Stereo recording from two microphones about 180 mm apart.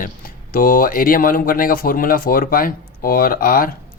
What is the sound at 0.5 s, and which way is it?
Speech, 50° left (ahead or behind).